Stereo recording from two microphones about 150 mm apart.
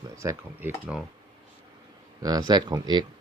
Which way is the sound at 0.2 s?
15° right (ahead or behind).